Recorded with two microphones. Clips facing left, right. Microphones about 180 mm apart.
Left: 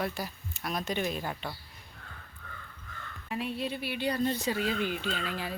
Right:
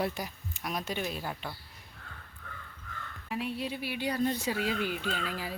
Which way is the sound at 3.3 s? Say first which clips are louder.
Left 1 dB; 10° right (ahead or behind).